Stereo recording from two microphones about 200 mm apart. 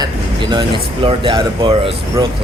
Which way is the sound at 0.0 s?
20° right (ahead or behind).